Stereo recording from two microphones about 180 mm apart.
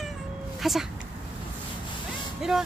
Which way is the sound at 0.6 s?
Centre (ahead or behind).